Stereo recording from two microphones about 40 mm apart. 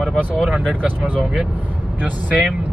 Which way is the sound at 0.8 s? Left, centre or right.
Right.